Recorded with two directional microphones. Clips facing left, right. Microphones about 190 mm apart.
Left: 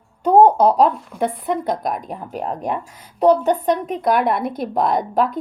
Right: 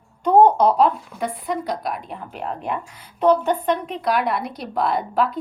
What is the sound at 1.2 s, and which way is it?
A woman's voice, 50° left (ahead or behind).